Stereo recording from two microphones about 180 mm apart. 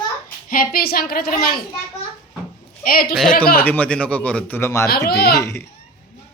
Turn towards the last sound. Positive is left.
turn(degrees=15)  # may be behind; listen again after turning